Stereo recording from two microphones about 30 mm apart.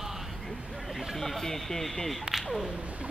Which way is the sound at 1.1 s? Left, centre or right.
Centre.